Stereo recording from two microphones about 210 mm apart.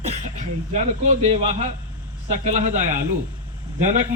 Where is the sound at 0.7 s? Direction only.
35° right (ahead or behind).